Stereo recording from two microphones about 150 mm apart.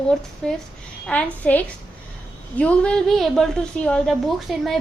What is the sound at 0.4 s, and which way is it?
A woman's voice, 5° left (ahead or behind).